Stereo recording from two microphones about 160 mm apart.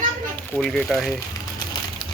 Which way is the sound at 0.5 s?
5° left (ahead or behind).